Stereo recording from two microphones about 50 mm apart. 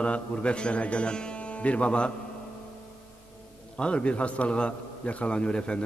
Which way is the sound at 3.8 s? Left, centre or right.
Left.